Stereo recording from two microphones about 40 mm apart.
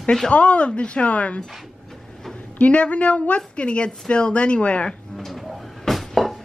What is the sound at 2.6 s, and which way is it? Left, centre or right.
A woman's voice, left.